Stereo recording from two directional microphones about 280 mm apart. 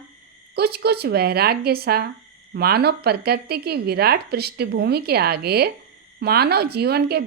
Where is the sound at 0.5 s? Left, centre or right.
Right.